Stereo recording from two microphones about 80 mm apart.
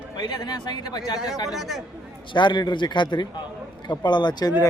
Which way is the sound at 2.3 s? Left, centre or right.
Left.